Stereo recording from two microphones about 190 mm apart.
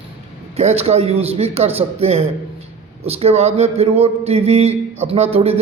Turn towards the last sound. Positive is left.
turn(degrees=-30)  # may be behind; listen again after turning